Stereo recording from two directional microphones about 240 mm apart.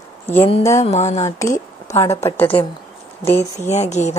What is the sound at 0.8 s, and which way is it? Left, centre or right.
Speech, left.